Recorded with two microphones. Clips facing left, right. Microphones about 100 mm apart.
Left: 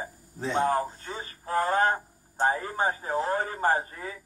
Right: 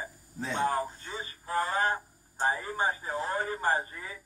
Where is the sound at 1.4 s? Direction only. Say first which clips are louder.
Left 5 dB; 45° left (ahead or behind).